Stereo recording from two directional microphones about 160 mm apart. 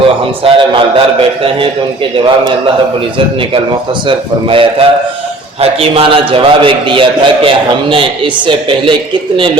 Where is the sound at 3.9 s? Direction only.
30° right (ahead or behind).